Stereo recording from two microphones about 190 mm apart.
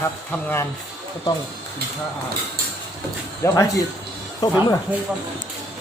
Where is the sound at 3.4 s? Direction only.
15° left (ahead or behind).